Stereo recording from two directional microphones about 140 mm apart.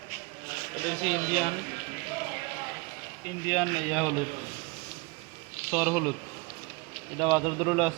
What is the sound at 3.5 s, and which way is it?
Speech, 5° left (ahead or behind).